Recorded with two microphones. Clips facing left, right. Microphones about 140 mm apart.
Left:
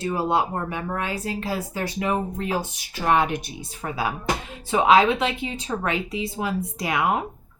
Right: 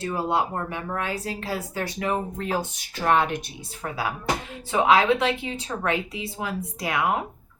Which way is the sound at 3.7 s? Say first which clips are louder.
Left 2 dB; 20° left (ahead or behind).